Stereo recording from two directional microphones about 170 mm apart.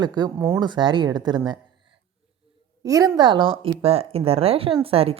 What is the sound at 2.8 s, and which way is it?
Speech, 20° right (ahead or behind).